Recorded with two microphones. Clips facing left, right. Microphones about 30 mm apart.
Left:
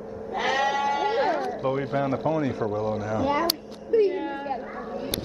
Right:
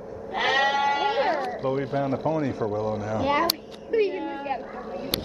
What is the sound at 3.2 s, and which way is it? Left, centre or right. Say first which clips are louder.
Speech: right 2 dB; right.